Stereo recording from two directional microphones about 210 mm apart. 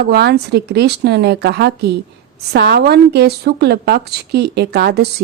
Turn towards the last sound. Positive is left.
turn(degrees=-50)  # may be behind; listen again after turning